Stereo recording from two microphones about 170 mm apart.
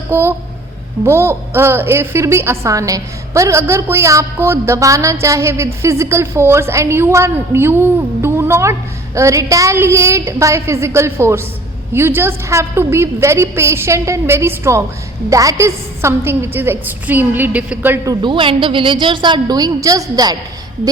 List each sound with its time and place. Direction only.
0.1 s a woman's voice: 15° right (ahead or behind)